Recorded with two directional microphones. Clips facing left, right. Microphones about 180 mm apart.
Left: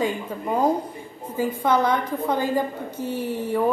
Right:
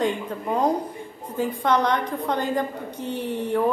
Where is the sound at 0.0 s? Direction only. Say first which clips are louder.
Right 1 dB; 5° left (ahead or behind).